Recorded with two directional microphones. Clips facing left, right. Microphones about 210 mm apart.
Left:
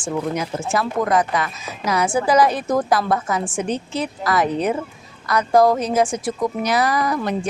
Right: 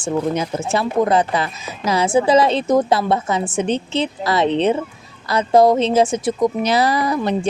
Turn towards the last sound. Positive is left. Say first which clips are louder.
# right 2 dB
turn(degrees=-25)  # may be behind; listen again after turning